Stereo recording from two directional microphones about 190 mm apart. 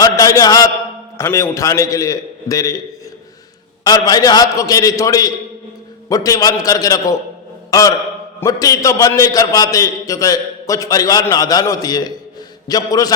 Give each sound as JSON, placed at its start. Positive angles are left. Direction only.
{"t": 0.0, "sound": "a sound", "side_deg": 20}
{"t": 1.2, "sound": "a man's voice", "side_deg": 15}
{"t": 3.8, "sound": "a man's voice", "side_deg": 20}